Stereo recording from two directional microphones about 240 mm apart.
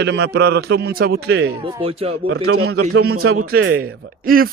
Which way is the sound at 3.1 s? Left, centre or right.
Right.